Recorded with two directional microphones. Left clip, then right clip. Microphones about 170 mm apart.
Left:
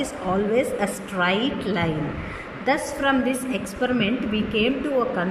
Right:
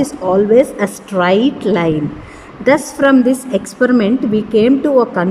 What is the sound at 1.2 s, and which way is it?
A woman's voice, 85° right.